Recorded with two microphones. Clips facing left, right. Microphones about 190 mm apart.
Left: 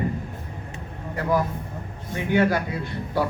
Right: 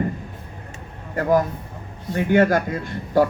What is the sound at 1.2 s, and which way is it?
A man's voice, 45° right (ahead or behind).